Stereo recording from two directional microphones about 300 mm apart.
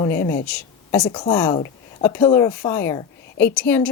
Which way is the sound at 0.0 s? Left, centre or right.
Centre.